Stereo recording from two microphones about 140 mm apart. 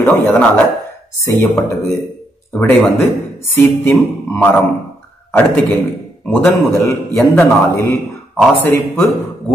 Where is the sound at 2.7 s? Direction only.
10° left (ahead or behind).